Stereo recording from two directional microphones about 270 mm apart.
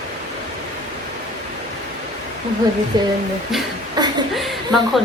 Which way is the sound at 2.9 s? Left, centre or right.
Centre.